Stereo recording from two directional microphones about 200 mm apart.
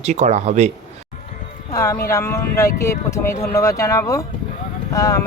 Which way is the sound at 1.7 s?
15° left (ahead or behind).